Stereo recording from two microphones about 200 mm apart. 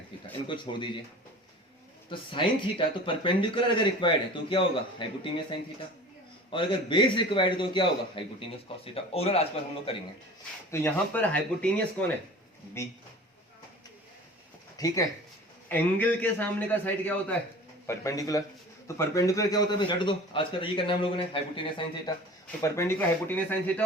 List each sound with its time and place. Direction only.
0.4 s speech: 25° left (ahead or behind)
2.0 s speech: 25° left (ahead or behind)
10.7 s a man's voice: 10° left (ahead or behind)
14.8 s a man's voice: 15° left (ahead or behind)
22.6 s a man's voice: 15° left (ahead or behind)